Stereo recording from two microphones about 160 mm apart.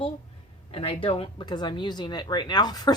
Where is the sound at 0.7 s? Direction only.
35° left (ahead or behind).